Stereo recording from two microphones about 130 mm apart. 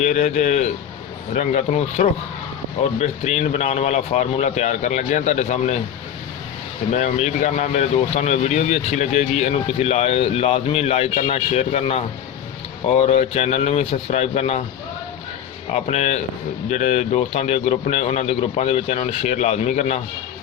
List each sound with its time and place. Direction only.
0.0 s speech: 65° left (ahead or behind)
6.9 s speech: 65° left (ahead or behind)
15.7 s speech: 60° left (ahead or behind)